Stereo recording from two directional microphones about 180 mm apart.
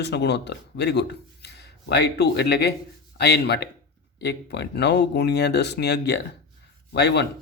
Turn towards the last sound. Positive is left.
turn(degrees=70)  # may be behind; listen again after turning